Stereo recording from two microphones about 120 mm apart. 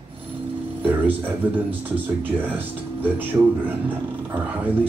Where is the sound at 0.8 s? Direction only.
15° right (ahead or behind).